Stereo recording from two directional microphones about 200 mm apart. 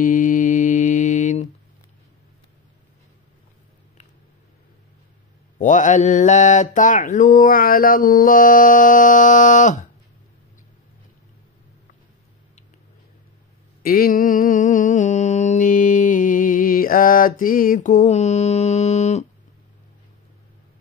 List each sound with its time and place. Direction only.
0.0 s mantra: 40° left (ahead or behind)
5.6 s mantra: 40° left (ahead or behind)
13.8 s mantra: 45° left (ahead or behind)